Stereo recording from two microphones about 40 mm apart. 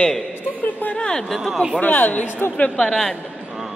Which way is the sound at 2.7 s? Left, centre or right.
Centre.